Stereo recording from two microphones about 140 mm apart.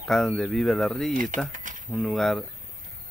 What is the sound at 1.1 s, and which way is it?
Speech, 70° right (ahead or behind).